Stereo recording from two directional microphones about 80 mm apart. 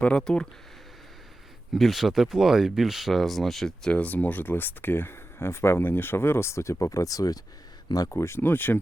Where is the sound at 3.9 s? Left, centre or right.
Centre; by 8.2 s left.